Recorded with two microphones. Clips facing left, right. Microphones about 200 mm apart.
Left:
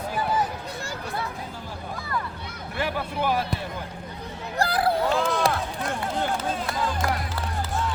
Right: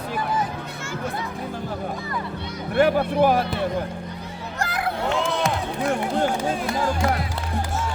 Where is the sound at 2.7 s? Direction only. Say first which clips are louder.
Right 10 dB; 55° right (ahead or behind).